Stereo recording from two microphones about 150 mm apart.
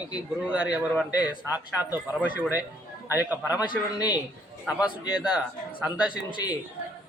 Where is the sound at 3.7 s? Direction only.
30° left (ahead or behind).